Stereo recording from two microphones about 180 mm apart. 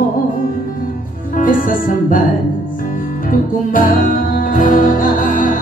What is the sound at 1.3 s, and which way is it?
Music, 50° left (ahead or behind).